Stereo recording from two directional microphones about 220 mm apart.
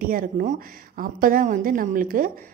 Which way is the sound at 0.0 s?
40° right (ahead or behind).